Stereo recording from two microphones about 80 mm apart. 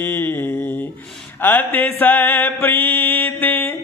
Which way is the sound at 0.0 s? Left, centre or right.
Left.